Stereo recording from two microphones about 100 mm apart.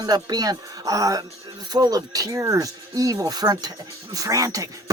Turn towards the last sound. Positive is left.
turn(degrees=-35)  # may be behind; listen again after turning